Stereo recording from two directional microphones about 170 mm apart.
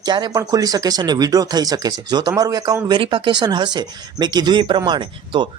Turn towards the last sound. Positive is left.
turn(degrees=-25)  # may be behind; listen again after turning